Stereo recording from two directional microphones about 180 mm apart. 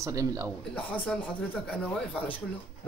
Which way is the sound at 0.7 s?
10° left (ahead or behind).